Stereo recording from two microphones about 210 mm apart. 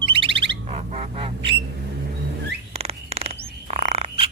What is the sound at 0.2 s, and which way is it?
Bird, 25° right (ahead or behind).